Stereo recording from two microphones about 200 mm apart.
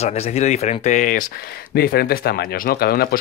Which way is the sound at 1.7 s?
50° left (ahead or behind).